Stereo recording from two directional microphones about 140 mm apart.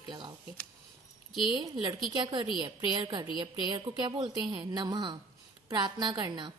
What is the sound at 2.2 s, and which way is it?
A woman's voice, 30° right (ahead or behind).